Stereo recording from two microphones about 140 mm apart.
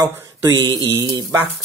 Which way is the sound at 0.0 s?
25° right (ahead or behind).